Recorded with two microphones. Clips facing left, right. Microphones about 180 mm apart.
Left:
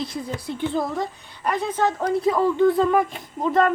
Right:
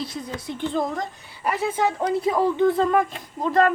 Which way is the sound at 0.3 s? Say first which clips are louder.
Left 1 dB; 20° right (ahead or behind).